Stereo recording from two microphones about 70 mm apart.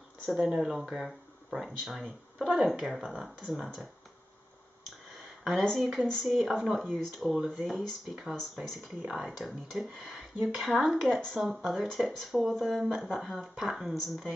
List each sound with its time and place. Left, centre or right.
0.3 s speech: centre
5.6 s speech: centre
7.3 s speech: centre
7.6 s speech: centre
9.0 s speech: centre